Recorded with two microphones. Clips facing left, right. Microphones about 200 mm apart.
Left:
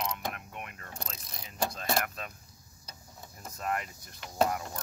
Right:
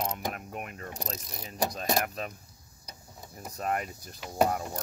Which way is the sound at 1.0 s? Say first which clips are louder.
Right 6 dB; 40° right (ahead or behind).